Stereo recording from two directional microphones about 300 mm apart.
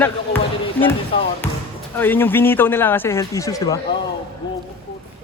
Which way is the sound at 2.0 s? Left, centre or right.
Centre.